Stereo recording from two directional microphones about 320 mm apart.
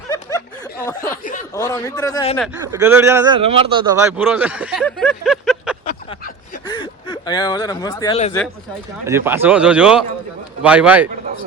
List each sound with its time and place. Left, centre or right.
0.1 s a sound: centre
1.2 s chuckle: left
1.5 s a man's voice: centre
2.6 s a man's voice: centre
5.8 s a sound: left
6.7 s speech: centre
9.0 s a man's voice: centre